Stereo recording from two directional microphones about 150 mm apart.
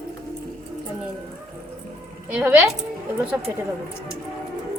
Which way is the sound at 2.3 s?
10° right (ahead or behind).